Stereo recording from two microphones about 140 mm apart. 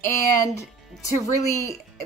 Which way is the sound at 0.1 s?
20° left (ahead or behind).